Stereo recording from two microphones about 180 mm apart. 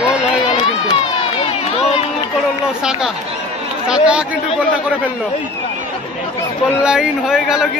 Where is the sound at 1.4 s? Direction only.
35° left (ahead or behind).